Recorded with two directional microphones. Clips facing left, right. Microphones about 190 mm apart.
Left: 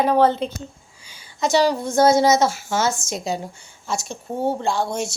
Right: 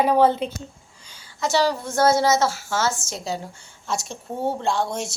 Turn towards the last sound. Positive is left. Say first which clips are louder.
# left 1 dB
turn(degrees=0)  # may be behind; listen again after turning